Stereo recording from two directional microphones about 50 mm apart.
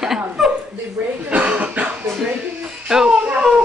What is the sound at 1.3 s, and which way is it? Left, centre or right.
Speech, right.